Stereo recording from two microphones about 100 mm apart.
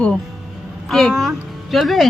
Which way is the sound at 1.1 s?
5° right (ahead or behind).